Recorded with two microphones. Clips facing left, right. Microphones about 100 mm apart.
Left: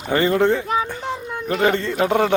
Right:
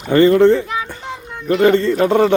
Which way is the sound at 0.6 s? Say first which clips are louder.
Left 2 dB; 45° left (ahead or behind).